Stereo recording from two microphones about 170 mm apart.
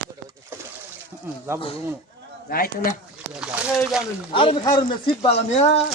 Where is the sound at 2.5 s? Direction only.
60° left (ahead or behind).